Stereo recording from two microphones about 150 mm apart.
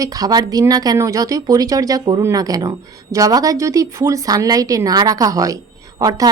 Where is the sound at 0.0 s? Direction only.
25° right (ahead or behind).